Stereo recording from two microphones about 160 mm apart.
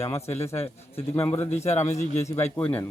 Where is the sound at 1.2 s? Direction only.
15° left (ahead or behind).